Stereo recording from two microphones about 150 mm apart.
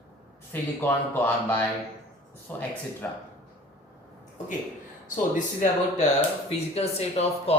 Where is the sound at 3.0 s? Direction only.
10° left (ahead or behind).